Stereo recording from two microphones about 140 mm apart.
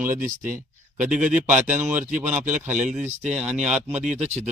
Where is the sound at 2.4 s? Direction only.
60° right (ahead or behind).